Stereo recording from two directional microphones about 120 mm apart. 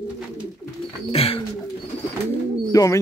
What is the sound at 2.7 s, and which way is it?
Speech, 30° left (ahead or behind).